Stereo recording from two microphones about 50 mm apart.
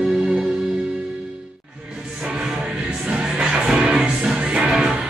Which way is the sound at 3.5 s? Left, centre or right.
Centre.